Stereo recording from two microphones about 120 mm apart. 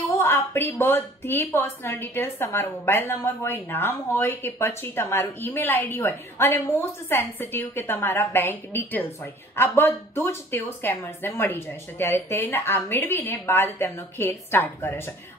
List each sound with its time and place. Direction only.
0.2 s speech: 20° left (ahead or behind)